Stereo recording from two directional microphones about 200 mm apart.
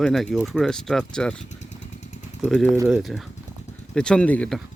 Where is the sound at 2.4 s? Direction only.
Centre (ahead or behind).